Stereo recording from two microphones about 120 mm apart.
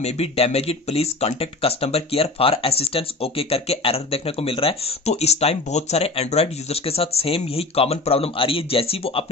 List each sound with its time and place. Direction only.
0.0 s speech: 60° left (ahead or behind)